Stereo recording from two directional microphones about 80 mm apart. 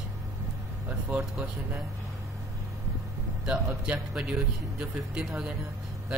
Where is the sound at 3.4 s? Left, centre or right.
Centre.